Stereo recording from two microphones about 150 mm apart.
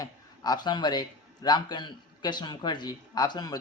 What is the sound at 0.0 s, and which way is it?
A man's voice, 25° left (ahead or behind).